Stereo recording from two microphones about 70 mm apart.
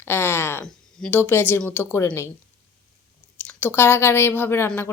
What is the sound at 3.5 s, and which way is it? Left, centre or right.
Speech, left.